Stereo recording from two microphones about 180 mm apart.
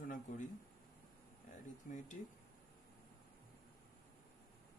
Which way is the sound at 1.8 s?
45° left (ahead or behind).